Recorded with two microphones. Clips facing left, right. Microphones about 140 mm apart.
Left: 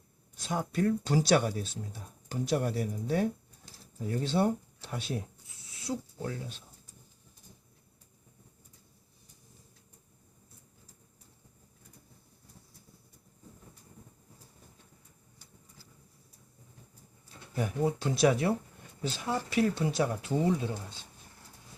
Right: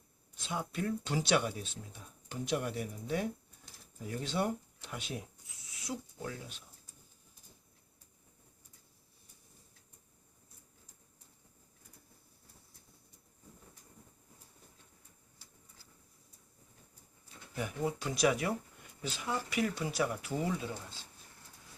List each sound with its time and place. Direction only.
0.3 s speech: 40° left (ahead or behind)
17.5 s speech: 35° left (ahead or behind)